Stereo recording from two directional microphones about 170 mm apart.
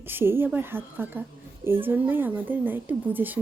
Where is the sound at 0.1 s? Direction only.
10° right (ahead or behind).